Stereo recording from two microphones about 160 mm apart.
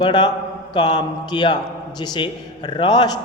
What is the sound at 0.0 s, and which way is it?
A man's voice, 25° left (ahead or behind).